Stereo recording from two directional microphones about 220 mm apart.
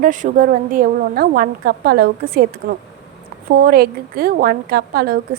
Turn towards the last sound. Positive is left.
turn(degrees=-40)  # may be behind; listen again after turning